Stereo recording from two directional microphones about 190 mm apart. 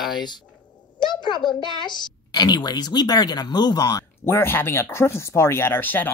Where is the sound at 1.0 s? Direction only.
25° left (ahead or behind).